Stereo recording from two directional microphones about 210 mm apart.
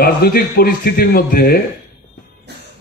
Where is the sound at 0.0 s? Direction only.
45° left (ahead or behind).